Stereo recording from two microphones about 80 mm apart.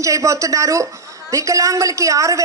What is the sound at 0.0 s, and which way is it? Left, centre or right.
A man's voice, right.